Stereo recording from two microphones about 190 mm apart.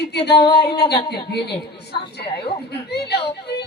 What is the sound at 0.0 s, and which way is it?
Speech, 60° left (ahead or behind).